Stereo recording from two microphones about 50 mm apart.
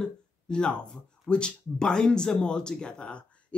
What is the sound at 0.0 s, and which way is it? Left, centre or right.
Speech, centre.